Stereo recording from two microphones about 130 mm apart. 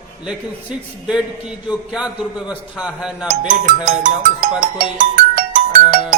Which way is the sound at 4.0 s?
90° right.